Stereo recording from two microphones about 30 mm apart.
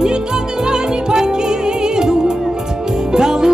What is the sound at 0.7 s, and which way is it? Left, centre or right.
Music, right.